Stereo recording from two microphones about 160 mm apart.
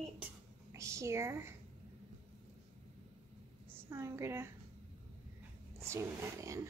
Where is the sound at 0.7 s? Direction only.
20° right (ahead or behind).